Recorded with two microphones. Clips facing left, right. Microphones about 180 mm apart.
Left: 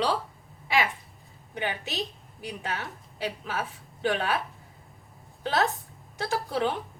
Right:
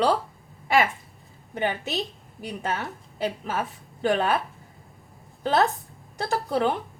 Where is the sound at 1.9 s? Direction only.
Centre (ahead or behind).